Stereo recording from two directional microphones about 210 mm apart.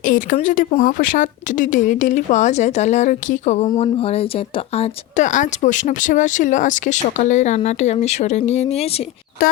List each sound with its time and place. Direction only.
0.0 s speech: 40° left (ahead or behind)
9.4 s speech: 45° left (ahead or behind)